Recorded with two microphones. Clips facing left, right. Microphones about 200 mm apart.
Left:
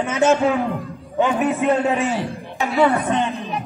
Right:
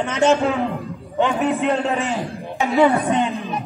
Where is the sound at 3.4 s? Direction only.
15° left (ahead or behind).